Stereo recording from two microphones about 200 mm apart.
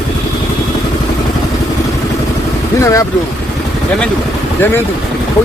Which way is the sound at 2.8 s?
15° left (ahead or behind).